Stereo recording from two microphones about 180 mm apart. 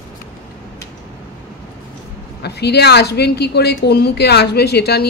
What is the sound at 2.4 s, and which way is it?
A woman's voice, 65° left (ahead or behind).